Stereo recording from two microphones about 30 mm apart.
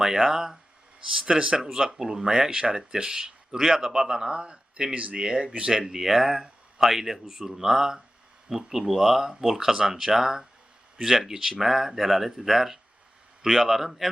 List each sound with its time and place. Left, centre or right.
0.0 s speech: centre
1.1 s speech: right